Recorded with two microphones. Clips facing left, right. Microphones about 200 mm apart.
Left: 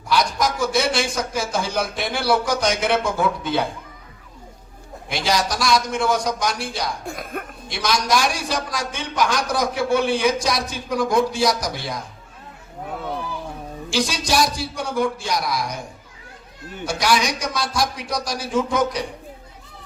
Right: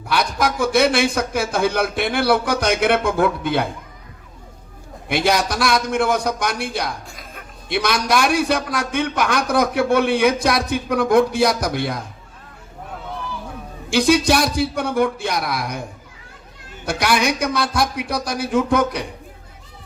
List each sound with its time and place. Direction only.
0.1 s a man's voice: 60° right (ahead or behind)
5.0 s a man's voice: 60° right (ahead or behind)
7.1 s speech: 55° left (ahead or behind)
7.7 s a man's voice: 60° right (ahead or behind)
13.9 s a man's voice: 60° right (ahead or behind)
16.8 s a man's voice: 60° right (ahead or behind)